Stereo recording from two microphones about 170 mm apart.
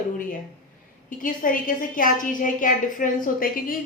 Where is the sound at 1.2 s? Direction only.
55° left (ahead or behind).